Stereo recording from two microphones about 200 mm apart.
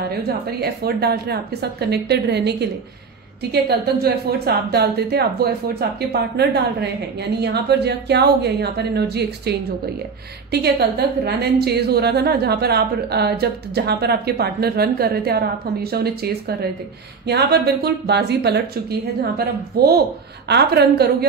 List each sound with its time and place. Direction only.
0.6 s a woman's voice: 50° right (ahead or behind)